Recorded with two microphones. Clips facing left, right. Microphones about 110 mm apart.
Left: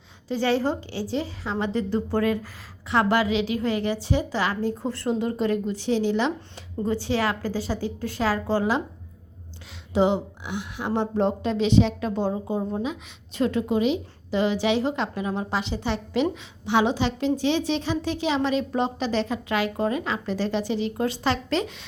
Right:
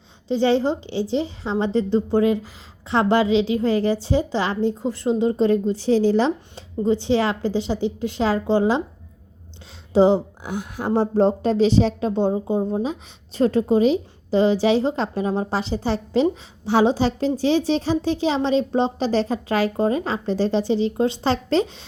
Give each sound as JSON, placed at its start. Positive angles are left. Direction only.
{"t": 0.3, "sound": "speech", "side_deg": -25}
{"t": 4.8, "sound": "speech", "side_deg": -15}
{"t": 9.9, "sound": "a woman's voice", "side_deg": -35}